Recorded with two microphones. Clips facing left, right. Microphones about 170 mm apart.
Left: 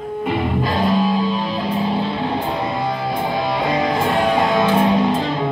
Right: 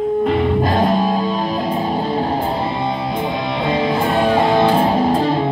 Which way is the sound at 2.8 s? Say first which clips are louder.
Right 1 dB; 25° right (ahead or behind).